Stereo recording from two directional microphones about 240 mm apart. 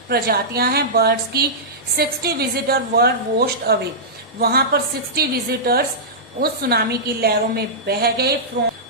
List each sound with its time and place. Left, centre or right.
0.1 s a woman's voice: right